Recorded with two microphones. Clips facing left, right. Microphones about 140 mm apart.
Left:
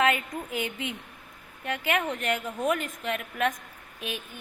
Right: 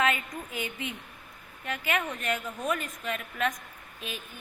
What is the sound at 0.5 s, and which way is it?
A woman's voice, 65° left (ahead or behind).